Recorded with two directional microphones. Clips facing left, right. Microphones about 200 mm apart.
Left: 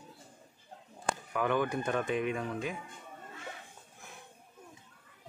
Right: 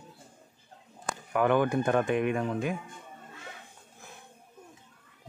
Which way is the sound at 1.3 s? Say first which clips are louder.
Right 7 dB; 55° right (ahead or behind).